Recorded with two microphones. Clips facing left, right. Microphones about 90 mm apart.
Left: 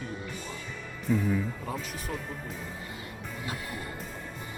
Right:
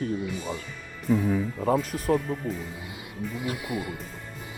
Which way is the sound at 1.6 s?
45° right (ahead or behind).